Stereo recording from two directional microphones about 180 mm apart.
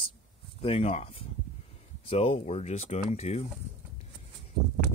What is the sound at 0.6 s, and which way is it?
Speech, 35° left (ahead or behind).